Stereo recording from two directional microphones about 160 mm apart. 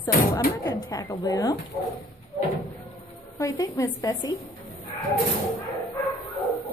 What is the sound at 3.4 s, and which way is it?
A woman's voice, 20° left (ahead or behind).